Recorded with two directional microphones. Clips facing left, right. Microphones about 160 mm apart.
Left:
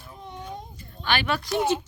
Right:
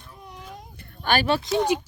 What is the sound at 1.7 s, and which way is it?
Speech, 10° right (ahead or behind).